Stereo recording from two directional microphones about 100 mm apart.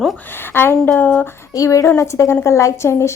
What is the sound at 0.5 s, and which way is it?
Speech, 20° left (ahead or behind).